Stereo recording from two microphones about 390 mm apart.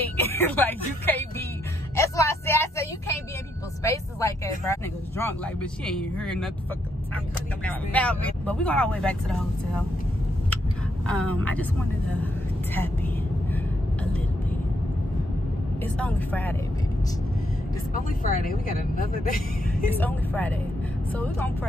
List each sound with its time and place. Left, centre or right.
0.2 s speech: centre
2.0 s vehicle: centre
3.8 s speech: centre
7.6 s speech: centre
11.1 s speech: centre
15.8 s speech: centre
17.9 s speech: left
19.9 s speech: centre